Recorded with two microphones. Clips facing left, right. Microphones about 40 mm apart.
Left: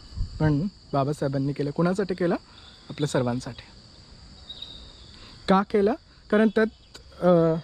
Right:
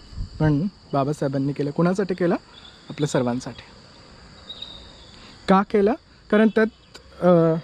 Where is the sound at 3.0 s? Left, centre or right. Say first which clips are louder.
Right 3 dB; right.